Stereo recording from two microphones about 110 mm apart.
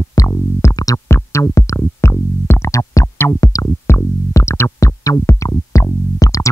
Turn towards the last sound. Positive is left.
turn(degrees=30)  # may be behind; listen again after turning